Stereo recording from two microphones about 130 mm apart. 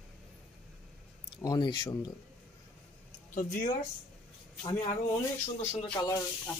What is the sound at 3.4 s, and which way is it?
Speech, 90° left.